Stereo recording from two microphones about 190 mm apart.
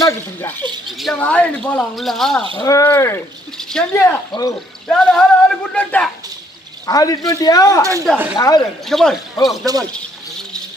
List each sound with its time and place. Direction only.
0.0 s speech: 10° left (ahead or behind)
0.9 s speech: centre (ahead or behind)
2.6 s speech: 15° left (ahead or behind)
4.9 s speech: 5° left (ahead or behind)
6.8 s speech: 20° left (ahead or behind)
7.8 s speech: 15° right (ahead or behind)
8.4 s speech: 20° left (ahead or behind)
8.8 s speech: centre (ahead or behind)